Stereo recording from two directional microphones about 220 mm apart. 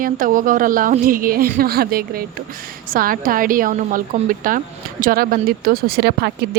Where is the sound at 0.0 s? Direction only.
40° right (ahead or behind).